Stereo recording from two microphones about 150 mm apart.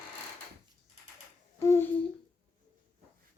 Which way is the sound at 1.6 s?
20° left (ahead or behind).